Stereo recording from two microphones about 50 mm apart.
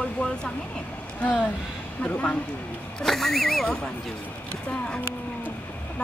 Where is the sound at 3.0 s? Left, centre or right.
Centre.